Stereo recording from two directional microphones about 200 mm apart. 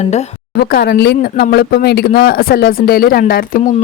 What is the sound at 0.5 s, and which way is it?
Speech, 55° left (ahead or behind).